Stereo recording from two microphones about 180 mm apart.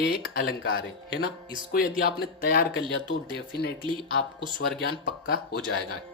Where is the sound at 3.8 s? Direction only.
25° right (ahead or behind).